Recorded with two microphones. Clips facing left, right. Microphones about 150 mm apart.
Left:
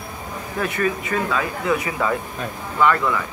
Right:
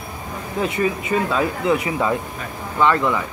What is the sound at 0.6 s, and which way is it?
Speech, 20° right (ahead or behind).